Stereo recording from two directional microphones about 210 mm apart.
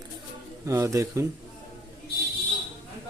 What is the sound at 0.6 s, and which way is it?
Speech, 15° right (ahead or behind).